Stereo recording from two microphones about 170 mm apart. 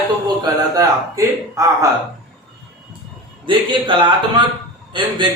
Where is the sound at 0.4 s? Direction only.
20° right (ahead or behind).